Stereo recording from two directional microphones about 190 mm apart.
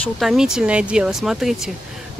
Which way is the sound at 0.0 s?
Centre (ahead or behind).